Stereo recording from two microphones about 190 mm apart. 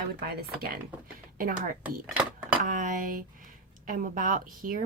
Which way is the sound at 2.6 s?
45° right (ahead or behind).